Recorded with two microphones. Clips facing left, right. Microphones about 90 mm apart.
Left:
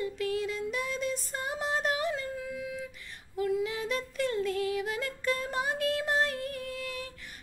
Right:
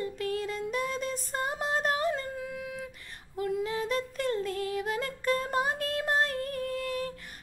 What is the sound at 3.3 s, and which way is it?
Female singing, 40° right (ahead or behind).